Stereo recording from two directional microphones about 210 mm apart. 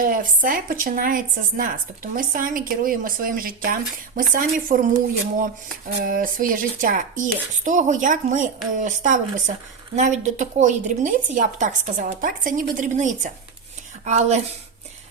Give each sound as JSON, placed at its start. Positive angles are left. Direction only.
{"t": 0.0, "sound": "a woman's voice", "side_deg": -40}
{"t": 6.1, "sound": "a woman's voice", "side_deg": -40}